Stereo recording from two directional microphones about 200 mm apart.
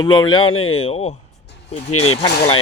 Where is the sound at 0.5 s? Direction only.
90° left.